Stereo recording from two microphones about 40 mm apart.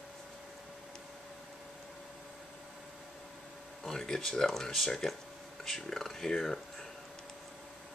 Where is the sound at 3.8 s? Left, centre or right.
Centre.